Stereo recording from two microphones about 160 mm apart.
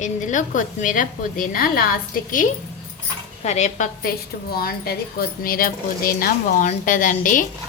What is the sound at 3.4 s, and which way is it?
Speech, 45° left (ahead or behind).